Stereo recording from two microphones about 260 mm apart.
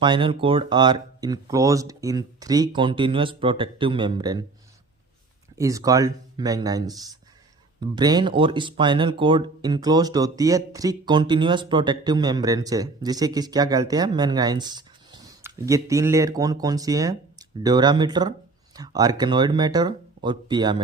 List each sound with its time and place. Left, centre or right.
0.0 s speech: centre
5.5 s speech: centre